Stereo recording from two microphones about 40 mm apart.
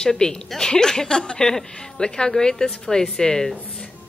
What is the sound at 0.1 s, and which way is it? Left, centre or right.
A woman's voice, centre.